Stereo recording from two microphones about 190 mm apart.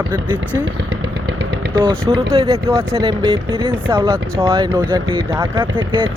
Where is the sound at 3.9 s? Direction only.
15° right (ahead or behind).